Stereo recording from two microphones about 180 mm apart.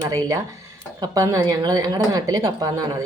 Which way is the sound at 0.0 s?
20° right (ahead or behind).